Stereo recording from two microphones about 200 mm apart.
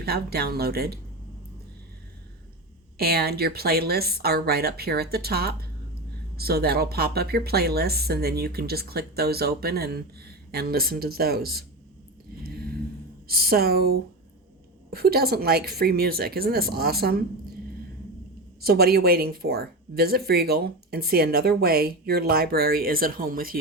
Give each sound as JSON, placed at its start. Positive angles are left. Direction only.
{"t": 0.0, "sound": "speech", "side_deg": -50}
{"t": 3.0, "sound": "speech", "side_deg": -50}
{"t": 12.4, "sound": "a sound", "side_deg": -50}
{"t": 13.2, "sound": "speech", "side_deg": -50}
{"t": 18.6, "sound": "speech", "side_deg": -50}